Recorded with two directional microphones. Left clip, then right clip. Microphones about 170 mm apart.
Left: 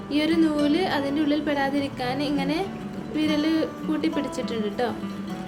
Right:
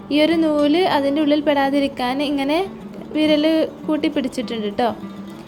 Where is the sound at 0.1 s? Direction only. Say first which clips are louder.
Right 6 dB; 40° right (ahead or behind).